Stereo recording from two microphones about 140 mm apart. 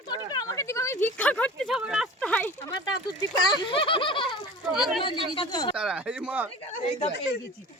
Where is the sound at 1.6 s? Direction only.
5° right (ahead or behind).